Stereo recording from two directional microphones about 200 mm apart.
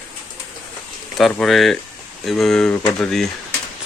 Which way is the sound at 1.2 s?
Centre (ahead or behind).